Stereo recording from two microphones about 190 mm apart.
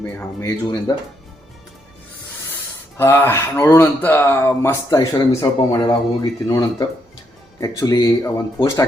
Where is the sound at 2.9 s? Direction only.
10° left (ahead or behind).